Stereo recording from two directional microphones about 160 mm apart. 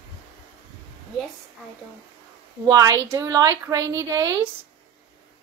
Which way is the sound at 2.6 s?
20° right (ahead or behind).